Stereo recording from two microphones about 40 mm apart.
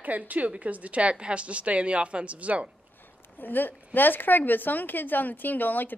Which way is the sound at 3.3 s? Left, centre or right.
Left.